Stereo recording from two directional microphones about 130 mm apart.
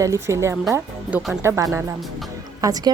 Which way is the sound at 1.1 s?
10° right (ahead or behind).